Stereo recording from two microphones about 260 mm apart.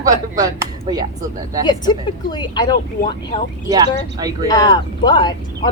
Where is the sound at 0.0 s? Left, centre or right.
Centre.